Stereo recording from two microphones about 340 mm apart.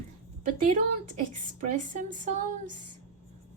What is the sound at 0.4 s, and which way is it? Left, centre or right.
A woman's voice, right.